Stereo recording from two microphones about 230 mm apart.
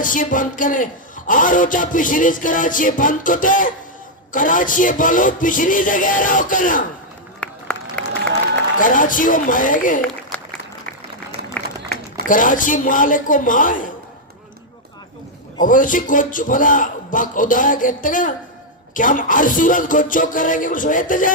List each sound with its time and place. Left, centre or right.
0.0 s a man's voice: left
7.3 s run: centre
8.8 s a man's voice: left
10.0 s applause: centre
12.3 s a man's voice: left
15.6 s a man's voice: left